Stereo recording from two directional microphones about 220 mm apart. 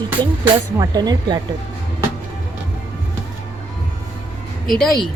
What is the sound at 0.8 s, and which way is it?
Speech, 20° right (ahead or behind).